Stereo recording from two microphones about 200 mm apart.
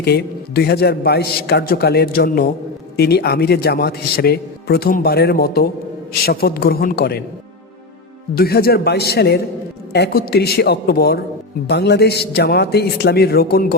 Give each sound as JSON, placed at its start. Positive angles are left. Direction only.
{"t": 0.0, "sound": "a man's voice", "side_deg": 55}
{"t": 8.4, "sound": "a man's voice", "side_deg": 50}